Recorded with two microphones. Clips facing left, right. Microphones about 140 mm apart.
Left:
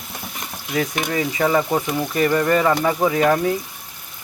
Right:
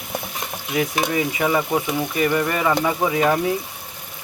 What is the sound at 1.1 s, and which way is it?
Speech, 10° right (ahead or behind).